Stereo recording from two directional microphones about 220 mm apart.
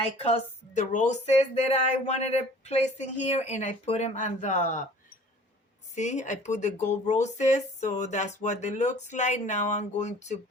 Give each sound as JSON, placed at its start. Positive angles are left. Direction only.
{"t": 0.3, "sound": "speech", "side_deg": 35}
{"t": 5.9, "sound": "speech", "side_deg": 30}